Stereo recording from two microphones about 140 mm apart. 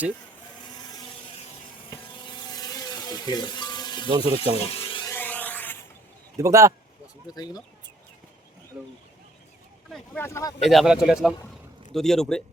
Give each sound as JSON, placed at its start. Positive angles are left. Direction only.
{"t": 1.9, "sound": "a sound", "side_deg": 30}
{"t": 4.2, "sound": "speech", "side_deg": 45}
{"t": 5.0, "sound": "a sound", "side_deg": 15}
{"t": 6.3, "sound": "speech", "side_deg": -25}
{"t": 7.3, "sound": "speech", "side_deg": 25}
{"t": 8.7, "sound": "speech", "side_deg": -5}
{"t": 10.2, "sound": "speech", "side_deg": 20}
{"t": 10.6, "sound": "speech", "side_deg": 0}